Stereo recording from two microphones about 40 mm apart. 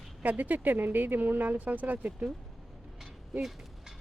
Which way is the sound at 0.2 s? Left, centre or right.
Right.